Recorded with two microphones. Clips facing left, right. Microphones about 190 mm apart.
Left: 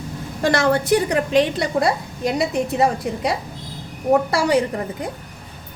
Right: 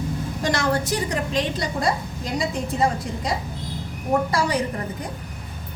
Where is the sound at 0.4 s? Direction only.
60° left (ahead or behind).